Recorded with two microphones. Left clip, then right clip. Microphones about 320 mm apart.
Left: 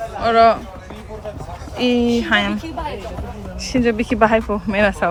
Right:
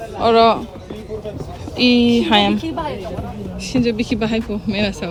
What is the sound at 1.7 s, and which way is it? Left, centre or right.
Speech, centre.